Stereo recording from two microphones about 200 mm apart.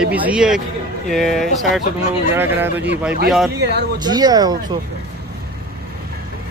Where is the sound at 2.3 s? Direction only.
10° right (ahead or behind).